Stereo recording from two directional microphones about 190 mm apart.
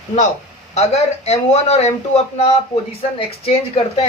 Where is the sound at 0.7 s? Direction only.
35° left (ahead or behind).